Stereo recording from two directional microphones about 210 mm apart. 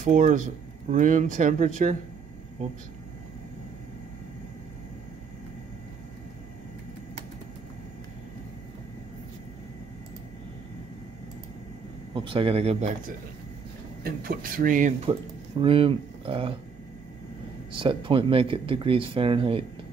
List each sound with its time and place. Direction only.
0.0 s speech: 35° right (ahead or behind)
12.1 s speech: 25° right (ahead or behind)
15.6 s speech: 25° right (ahead or behind)
17.7 s speech: 25° right (ahead or behind)